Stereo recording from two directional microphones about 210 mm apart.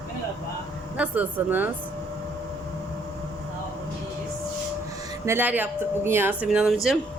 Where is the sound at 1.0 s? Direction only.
10° right (ahead or behind).